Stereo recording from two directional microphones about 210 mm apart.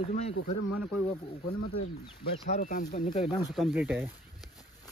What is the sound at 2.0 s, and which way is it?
Speech, 35° left (ahead or behind).